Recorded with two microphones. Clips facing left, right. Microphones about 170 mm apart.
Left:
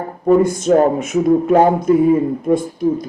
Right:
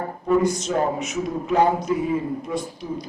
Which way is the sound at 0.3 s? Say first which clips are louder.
Left 8 dB; 50° left (ahead or behind).